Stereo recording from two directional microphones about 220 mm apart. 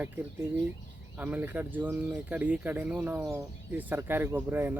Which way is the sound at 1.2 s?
10° right (ahead or behind).